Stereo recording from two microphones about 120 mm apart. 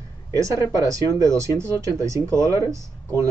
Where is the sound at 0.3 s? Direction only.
25° right (ahead or behind).